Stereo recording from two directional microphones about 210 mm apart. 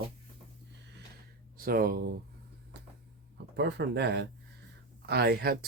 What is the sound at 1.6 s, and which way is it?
Speech, 45° right (ahead or behind).